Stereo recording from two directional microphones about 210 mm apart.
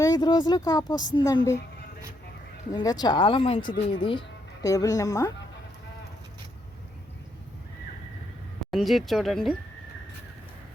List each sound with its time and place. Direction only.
0.0 s a woman's voice: 20° left (ahead or behind)
2.7 s a woman's voice: 20° left (ahead or behind)
8.7 s speech: centre (ahead or behind)